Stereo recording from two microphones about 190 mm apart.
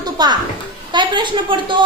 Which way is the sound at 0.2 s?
20° right (ahead or behind).